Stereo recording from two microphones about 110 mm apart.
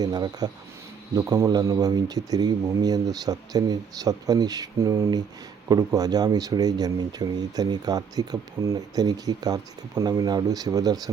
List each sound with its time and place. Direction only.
0.0 s speech: 35° right (ahead or behind)